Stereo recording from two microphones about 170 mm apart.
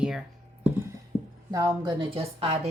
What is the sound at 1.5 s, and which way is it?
A woman's voice, 20° right (ahead or behind).